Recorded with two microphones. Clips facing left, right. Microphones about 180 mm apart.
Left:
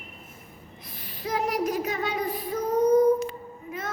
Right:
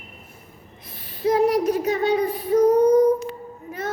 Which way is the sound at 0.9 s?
30° right (ahead or behind).